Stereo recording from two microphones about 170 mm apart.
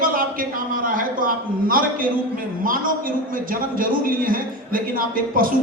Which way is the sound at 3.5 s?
55° right (ahead or behind).